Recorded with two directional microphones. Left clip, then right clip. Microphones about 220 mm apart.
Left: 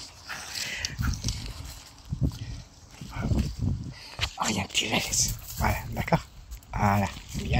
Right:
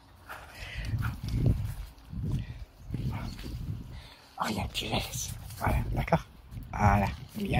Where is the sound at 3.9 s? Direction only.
10° left (ahead or behind).